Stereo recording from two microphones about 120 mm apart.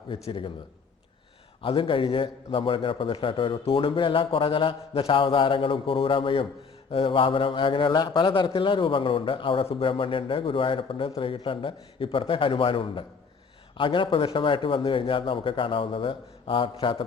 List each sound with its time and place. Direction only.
0.1 s a man's voice: 45° left (ahead or behind)
1.6 s a man's voice: 45° left (ahead or behind)